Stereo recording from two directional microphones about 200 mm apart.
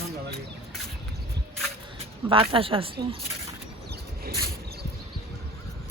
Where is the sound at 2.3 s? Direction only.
25° right (ahead or behind).